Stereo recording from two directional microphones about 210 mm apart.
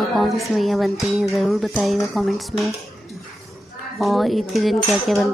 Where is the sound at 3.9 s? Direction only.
Centre (ahead or behind).